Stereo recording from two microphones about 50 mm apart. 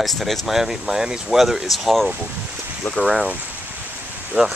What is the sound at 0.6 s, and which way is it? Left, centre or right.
Speech, centre.